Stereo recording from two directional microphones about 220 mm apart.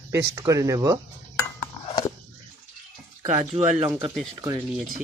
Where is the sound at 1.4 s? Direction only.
20° left (ahead or behind).